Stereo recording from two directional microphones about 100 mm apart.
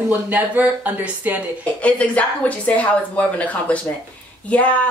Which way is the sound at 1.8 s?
15° left (ahead or behind).